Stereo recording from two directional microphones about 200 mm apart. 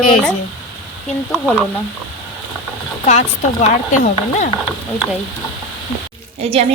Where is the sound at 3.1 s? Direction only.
35° left (ahead or behind).